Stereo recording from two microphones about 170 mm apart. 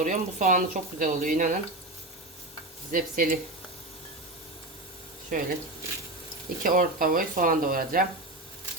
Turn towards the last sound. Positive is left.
turn(degrees=-55)  # may be behind; listen again after turning